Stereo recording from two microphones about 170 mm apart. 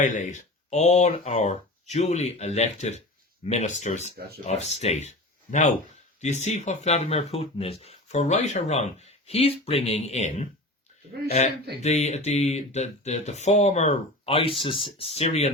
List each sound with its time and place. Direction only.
0.0 s speech: 45° left (ahead or behind)